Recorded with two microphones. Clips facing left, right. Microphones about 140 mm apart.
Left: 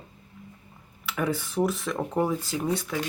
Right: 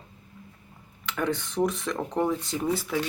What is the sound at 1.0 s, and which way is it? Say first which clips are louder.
Speech: even; 5° left (ahead or behind).